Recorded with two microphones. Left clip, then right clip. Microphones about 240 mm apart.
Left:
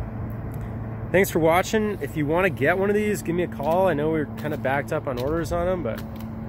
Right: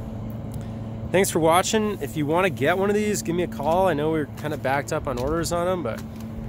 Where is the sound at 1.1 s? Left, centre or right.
Centre.